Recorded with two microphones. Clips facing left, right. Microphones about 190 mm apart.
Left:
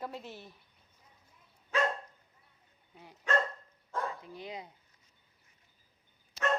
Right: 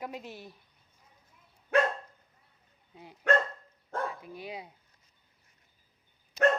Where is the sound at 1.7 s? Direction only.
60° right (ahead or behind).